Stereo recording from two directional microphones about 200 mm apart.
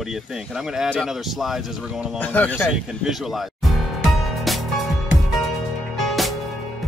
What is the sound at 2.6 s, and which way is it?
Speech, centre (ahead or behind).